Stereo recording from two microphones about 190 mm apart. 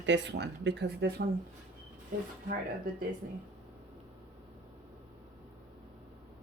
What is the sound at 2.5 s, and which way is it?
Speech, 50° right (ahead or behind).